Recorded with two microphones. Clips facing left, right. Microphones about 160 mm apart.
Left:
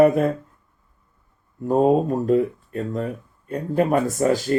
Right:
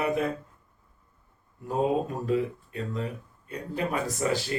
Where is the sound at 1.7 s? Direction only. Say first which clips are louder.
Left 9 dB; 45° left (ahead or behind).